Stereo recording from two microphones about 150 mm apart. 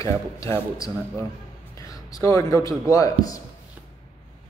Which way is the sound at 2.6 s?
20° left (ahead or behind).